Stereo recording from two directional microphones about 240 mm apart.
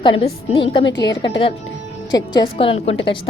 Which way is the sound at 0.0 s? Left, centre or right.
Left.